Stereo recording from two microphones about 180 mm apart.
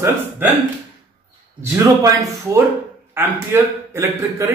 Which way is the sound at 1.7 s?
15° right (ahead or behind).